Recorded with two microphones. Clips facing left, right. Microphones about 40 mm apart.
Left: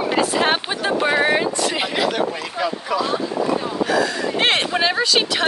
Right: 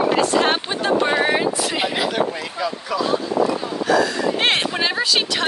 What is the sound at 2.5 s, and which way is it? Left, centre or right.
Speech, centre.